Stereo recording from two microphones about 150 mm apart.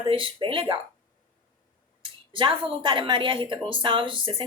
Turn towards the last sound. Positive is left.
turn(degrees=-35)  # may be behind; listen again after turning